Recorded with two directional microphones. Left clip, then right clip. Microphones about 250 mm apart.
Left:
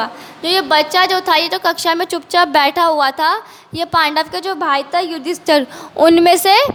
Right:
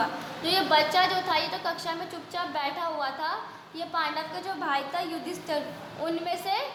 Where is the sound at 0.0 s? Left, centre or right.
Left.